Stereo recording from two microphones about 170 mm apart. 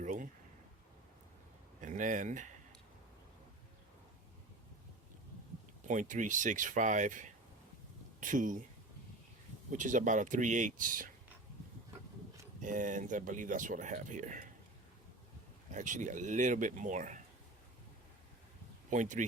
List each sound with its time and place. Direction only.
0.0 s a sound: 50° right (ahead or behind)
1.8 s speech: 50° right (ahead or behind)
5.8 s speech: 50° right (ahead or behind)
9.7 s speech: 50° right (ahead or behind)
12.6 s speech: 50° right (ahead or behind)
15.7 s speech: 50° right (ahead or behind)
18.9 s speech: 45° right (ahead or behind)